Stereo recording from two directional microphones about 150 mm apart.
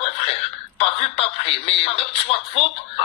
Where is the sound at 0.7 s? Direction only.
40° left (ahead or behind).